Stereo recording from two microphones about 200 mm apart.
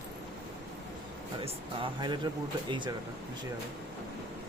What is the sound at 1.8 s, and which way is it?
Speech, 20° right (ahead or behind).